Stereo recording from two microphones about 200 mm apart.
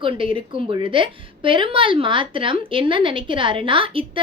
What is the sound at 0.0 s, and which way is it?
A woman's voice, 25° right (ahead or behind).